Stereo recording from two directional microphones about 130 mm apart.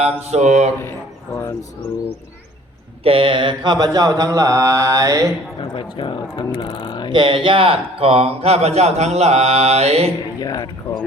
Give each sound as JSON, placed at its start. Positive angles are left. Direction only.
{"t": 0.0, "sound": "mantra", "side_deg": -55}
{"t": 3.0, "sound": "mantra", "side_deg": -45}
{"t": 5.7, "sound": "speech", "side_deg": 40}
{"t": 7.1, "sound": "speech", "side_deg": -40}
{"t": 10.4, "sound": "speech", "side_deg": 30}